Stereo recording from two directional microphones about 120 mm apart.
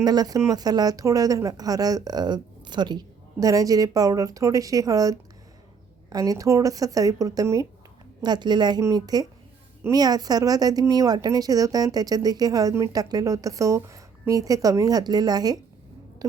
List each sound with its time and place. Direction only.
0.0 s speech: 35° right (ahead or behind)